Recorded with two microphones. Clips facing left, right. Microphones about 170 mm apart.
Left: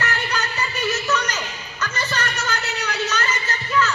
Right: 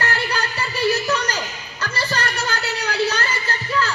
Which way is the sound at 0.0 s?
35° right (ahead or behind).